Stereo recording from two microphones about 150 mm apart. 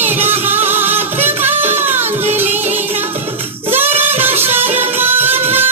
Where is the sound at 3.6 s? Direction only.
15° right (ahead or behind).